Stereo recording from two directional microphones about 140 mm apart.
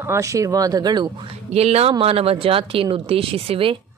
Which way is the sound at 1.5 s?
50° right (ahead or behind).